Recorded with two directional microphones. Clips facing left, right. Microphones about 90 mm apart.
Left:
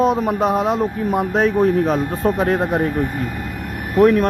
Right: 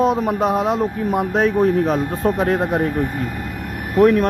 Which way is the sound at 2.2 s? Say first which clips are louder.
Even; 25° left (ahead or behind).